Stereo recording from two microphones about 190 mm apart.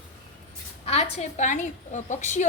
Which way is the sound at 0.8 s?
30° left (ahead or behind).